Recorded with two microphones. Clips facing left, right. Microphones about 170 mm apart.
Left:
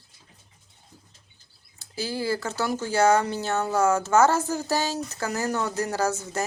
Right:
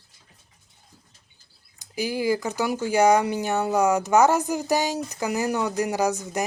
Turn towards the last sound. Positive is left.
turn(degrees=-15)  # may be behind; listen again after turning